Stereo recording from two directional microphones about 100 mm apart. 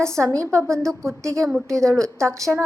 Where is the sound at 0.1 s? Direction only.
30° right (ahead or behind).